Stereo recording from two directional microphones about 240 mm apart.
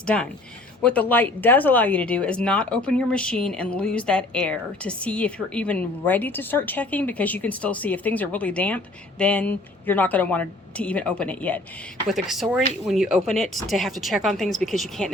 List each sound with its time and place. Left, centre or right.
0.0 s speech: centre